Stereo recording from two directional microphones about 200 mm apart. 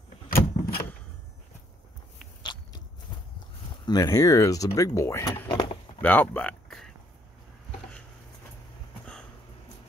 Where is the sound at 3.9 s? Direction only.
15° left (ahead or behind).